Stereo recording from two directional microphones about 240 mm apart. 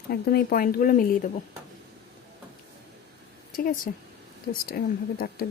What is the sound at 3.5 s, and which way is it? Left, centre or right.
Speech, left.